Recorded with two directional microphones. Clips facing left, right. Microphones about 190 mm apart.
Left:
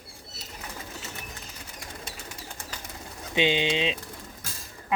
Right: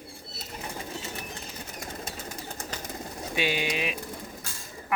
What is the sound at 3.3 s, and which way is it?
Speech, 20° left (ahead or behind).